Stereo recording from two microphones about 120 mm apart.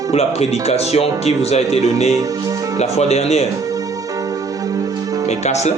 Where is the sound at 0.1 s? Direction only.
60° left (ahead or behind).